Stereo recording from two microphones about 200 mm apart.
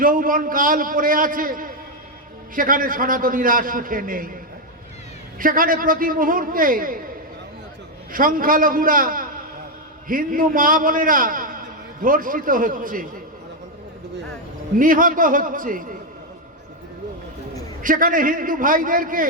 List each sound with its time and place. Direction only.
0.0 s a man's voice: 45° right (ahead or behind)
5.4 s a man's voice: 45° right (ahead or behind)
8.1 s a man's voice: 45° right (ahead or behind)
14.8 s a man's voice: 45° right (ahead or behind)
17.8 s a man's voice: 45° right (ahead or behind)